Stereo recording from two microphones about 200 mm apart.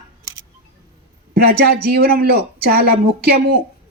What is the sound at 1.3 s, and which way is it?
A woman's voice, 50° right (ahead or behind).